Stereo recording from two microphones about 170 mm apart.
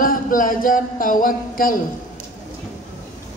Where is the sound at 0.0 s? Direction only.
55° left (ahead or behind).